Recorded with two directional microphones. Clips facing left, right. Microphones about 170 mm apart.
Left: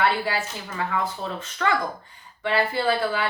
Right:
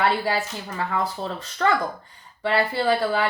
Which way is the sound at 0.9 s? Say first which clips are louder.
Right 2 dB; 35° right (ahead or behind).